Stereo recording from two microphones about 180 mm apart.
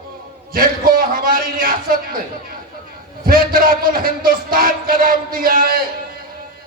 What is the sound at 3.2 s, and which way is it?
A man's voice, 55° right (ahead or behind).